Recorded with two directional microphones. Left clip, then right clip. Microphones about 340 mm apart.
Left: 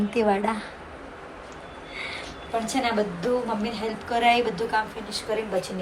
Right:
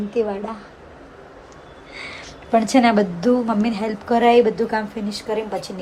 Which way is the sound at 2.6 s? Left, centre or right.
Right.